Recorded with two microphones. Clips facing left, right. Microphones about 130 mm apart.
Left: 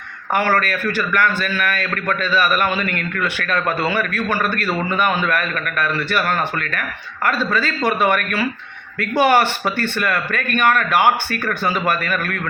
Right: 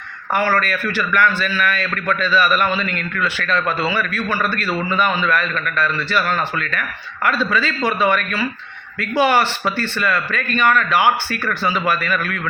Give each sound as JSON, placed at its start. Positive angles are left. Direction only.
{"t": 0.3, "sound": "a man's voice", "side_deg": 55}